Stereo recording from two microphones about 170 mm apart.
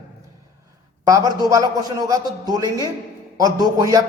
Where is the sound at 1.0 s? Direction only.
20° right (ahead or behind).